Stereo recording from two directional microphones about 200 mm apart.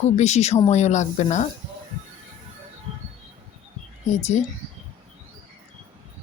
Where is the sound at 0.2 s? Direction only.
35° left (ahead or behind).